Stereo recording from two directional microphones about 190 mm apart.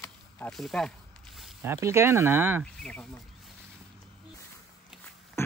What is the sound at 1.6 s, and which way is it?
Speech, 15° right (ahead or behind).